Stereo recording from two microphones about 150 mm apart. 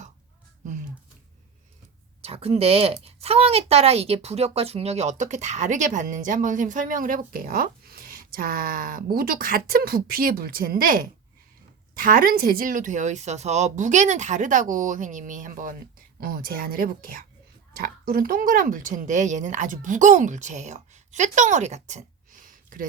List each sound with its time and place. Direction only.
0.6 s a sound: 55° right (ahead or behind)
2.2 s speech: 40° right (ahead or behind); by 15.7 s 65° right (ahead or behind)
16.2 s a woman's voice: 75° right (ahead or behind)